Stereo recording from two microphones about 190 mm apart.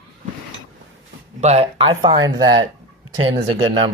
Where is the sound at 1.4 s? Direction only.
35° right (ahead or behind).